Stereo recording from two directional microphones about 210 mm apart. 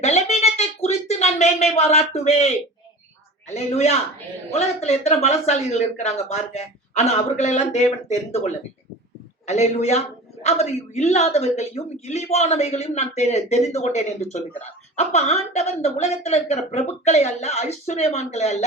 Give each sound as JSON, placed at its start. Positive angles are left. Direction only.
{"t": 0.0, "sound": "a sound", "side_deg": 30}
{"t": 3.4, "sound": "a woman's voice", "side_deg": 30}
{"t": 9.5, "sound": "a woman's voice", "side_deg": 30}